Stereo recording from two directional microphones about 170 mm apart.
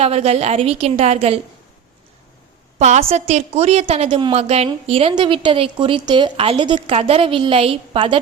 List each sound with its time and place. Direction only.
0.0 s a woman's voice: 40° right (ahead or behind)
2.7 s a woman's voice: 40° right (ahead or behind)